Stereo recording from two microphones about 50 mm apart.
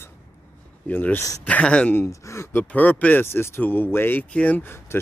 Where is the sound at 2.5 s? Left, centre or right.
Left.